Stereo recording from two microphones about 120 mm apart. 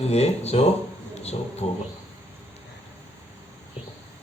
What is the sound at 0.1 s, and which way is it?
Speech, 60° left (ahead or behind).